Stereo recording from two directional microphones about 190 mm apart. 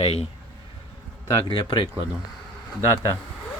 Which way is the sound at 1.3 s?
20° left (ahead or behind).